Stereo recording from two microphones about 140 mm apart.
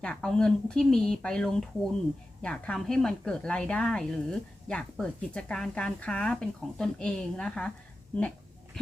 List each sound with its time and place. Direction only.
0.0 s speech: 5° left (ahead or behind)